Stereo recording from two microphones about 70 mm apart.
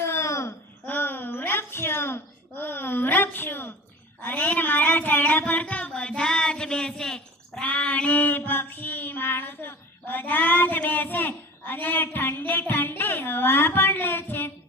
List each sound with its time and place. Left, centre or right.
0.0 s babbling: left
0.9 s a sound: left; by 7.7 s centre
7.7 s child singing: centre